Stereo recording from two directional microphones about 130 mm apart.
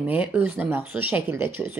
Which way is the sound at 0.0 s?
10° right (ahead or behind).